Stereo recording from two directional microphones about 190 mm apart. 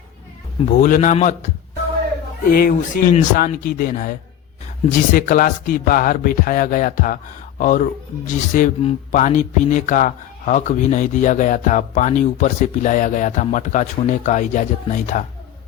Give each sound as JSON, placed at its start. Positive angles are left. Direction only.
{"t": 0.6, "sound": "speech", "side_deg": 40}
{"t": 2.5, "sound": "speech", "side_deg": 50}
{"t": 5.1, "sound": "speech", "side_deg": 45}